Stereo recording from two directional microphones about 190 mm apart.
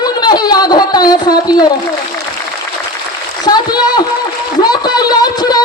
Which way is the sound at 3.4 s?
20° left (ahead or behind).